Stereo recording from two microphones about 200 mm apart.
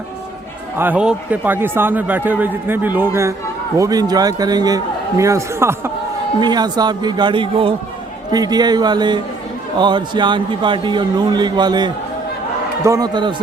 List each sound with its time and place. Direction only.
0.8 s a man's voice: 5° right (ahead or behind)